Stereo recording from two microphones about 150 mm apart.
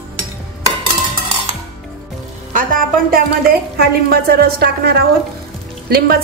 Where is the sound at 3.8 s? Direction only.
90° right.